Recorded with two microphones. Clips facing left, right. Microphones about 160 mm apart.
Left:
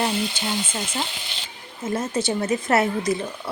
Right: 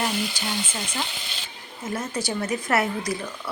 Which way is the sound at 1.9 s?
25° left (ahead or behind).